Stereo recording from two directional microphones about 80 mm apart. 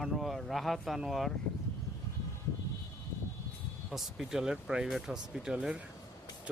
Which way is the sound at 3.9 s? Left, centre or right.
Centre.